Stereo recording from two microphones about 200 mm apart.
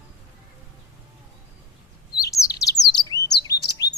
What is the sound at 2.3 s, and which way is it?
Chirp, 15° left (ahead or behind).